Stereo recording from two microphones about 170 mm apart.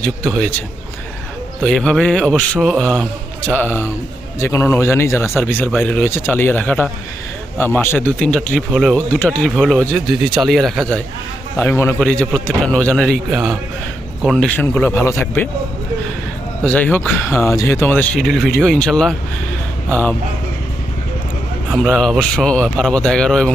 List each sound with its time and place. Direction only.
0.0 s a man's voice: 5° left (ahead or behind)
1.6 s a man's voice: 5° left (ahead or behind)
16.6 s speech: 10° left (ahead or behind)
21.7 s a man's voice: centre (ahead or behind)